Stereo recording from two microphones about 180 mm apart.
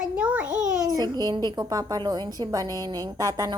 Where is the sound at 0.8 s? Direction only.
20° right (ahead or behind).